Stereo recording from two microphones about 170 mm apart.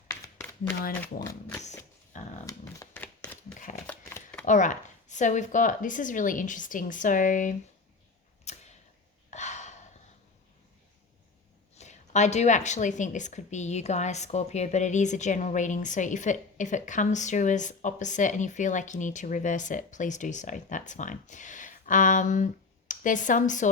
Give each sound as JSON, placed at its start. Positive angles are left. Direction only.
{"t": 1.0, "sound": "speech", "side_deg": 20}
{"t": 2.1, "sound": "shuffling cards", "side_deg": 45}
{"t": 3.0, "sound": "a sound", "side_deg": 5}
{"t": 3.6, "sound": "shuffling cards", "side_deg": 50}
{"t": 3.8, "sound": "chopping", "side_deg": 10}
{"t": 4.4, "sound": "a woman's voice", "side_deg": 45}
{"t": 8.5, "sound": "camera", "side_deg": 40}
{"t": 9.3, "sound": "gasp", "side_deg": 45}
{"t": 11.7, "sound": "a woman's voice", "side_deg": 40}